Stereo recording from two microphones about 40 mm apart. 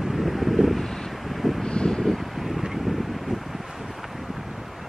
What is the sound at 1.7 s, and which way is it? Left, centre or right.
Vehicle, left.